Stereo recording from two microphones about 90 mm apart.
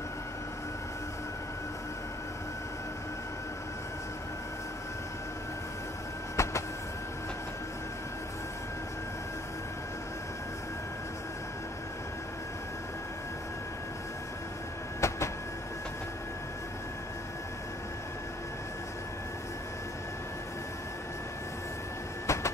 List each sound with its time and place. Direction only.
6.3 s vehicle: 35° left (ahead or behind)
15.0 s train: 35° left (ahead or behind)
22.2 s a sound: 35° left (ahead or behind)